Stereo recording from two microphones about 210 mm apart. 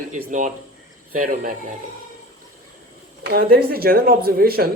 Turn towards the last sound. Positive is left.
turn(degrees=-45)  # may be behind; listen again after turning